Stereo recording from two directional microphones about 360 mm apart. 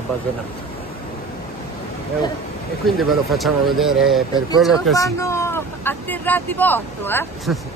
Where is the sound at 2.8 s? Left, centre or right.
Centre.